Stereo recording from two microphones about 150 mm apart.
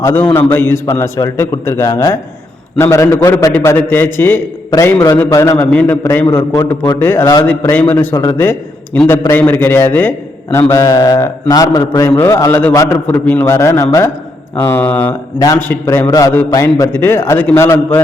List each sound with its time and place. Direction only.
0.0 s a man's voice: 15° left (ahead or behind)
5.5 s a man's voice: 10° left (ahead or behind)
15.4 s a man's voice: 20° left (ahead or behind)